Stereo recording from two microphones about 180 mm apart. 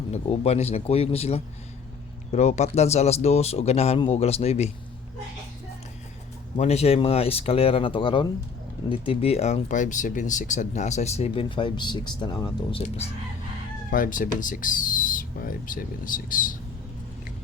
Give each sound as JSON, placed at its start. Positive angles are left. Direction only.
{"t": 0.1, "sound": "speech", "side_deg": 35}
{"t": 6.6, "sound": "speech", "side_deg": 35}
{"t": 13.9, "sound": "speech", "side_deg": 50}